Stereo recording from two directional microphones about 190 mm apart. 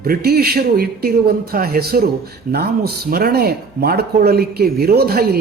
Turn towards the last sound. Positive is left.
turn(degrees=-55)  # may be behind; listen again after turning